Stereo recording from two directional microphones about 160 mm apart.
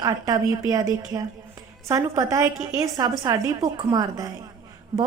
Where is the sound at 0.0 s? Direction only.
25° right (ahead or behind).